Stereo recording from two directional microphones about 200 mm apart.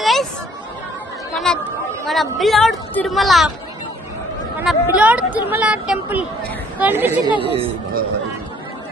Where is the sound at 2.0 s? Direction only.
Centre (ahead or behind).